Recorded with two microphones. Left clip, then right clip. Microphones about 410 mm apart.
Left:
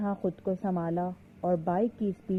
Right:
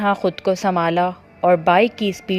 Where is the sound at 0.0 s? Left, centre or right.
Right.